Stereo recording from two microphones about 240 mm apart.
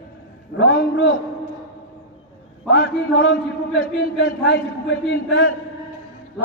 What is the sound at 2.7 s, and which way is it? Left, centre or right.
A man's voice, left.